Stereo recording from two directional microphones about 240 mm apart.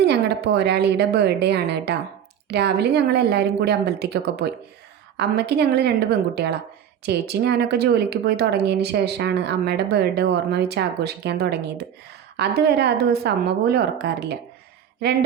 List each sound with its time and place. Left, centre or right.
0.0 s speech: right
7.0 s speech: right